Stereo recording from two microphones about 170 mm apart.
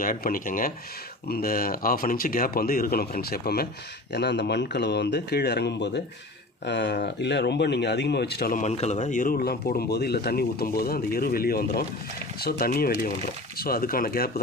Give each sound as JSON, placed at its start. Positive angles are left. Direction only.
{"t": 0.0, "sound": "speech", "side_deg": 55}
{"t": 4.1, "sound": "speech", "side_deg": 80}
{"t": 8.6, "sound": "speech", "side_deg": 40}